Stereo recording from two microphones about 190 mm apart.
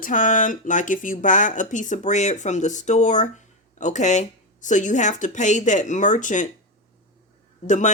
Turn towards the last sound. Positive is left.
turn(degrees=40)  # may be behind; listen again after turning